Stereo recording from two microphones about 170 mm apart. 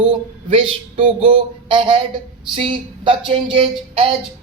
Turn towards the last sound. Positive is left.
turn(degrees=-30)  # may be behind; listen again after turning